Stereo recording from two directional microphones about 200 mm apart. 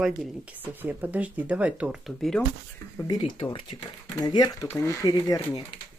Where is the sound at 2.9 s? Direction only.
20° left (ahead or behind).